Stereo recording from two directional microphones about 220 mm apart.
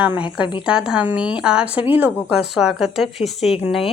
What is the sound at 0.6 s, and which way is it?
Speech, 5° right (ahead or behind).